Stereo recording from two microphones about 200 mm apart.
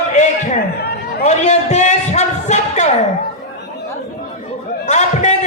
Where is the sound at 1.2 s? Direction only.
35° left (ahead or behind).